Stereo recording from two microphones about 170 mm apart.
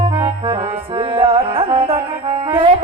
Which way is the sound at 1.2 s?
30° right (ahead or behind).